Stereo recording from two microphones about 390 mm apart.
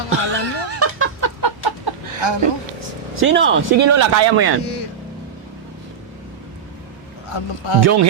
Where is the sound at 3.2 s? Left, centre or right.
Right.